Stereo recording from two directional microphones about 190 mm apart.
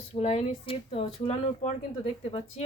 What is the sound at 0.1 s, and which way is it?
Speech, 35° left (ahead or behind).